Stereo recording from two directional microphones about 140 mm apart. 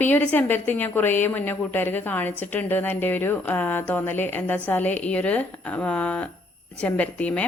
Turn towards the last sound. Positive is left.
turn(degrees=10)  # may be behind; listen again after turning